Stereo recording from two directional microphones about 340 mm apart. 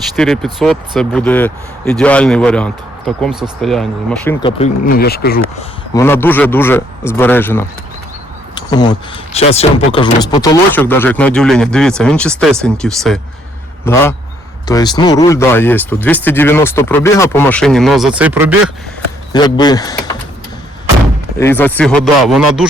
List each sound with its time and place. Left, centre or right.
0.2 s speech: centre
4.4 s speech: centre
5.9 s speech: centre
19.3 s speech: centre
21.3 s speech: centre